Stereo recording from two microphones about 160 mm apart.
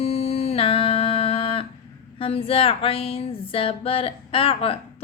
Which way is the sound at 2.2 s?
35° left (ahead or behind).